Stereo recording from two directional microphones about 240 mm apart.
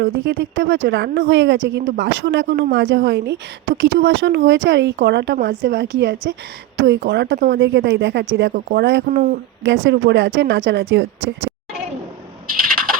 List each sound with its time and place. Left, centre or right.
0.0 s a woman's voice: right
9.0 s speech: right
9.6 s a woman's voice: right